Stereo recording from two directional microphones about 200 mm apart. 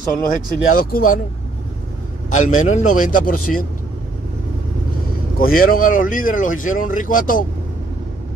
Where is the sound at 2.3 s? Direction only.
40° left (ahead or behind).